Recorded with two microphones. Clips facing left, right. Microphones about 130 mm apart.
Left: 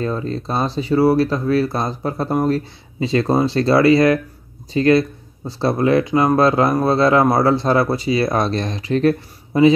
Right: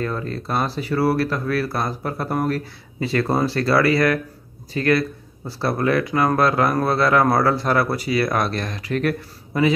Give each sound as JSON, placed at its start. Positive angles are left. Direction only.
{"t": 0.0, "sound": "speech", "side_deg": 25}